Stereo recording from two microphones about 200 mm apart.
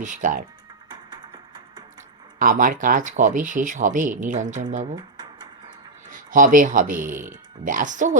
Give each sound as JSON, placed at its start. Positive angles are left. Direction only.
{"t": 0.0, "sound": "speech", "side_deg": -40}
{"t": 0.9, "sound": "music", "side_deg": -20}
{"t": 2.4, "sound": "speech", "side_deg": -40}
{"t": 4.9, "sound": "a sound", "side_deg": -20}
{"t": 6.1, "sound": "speech", "side_deg": -40}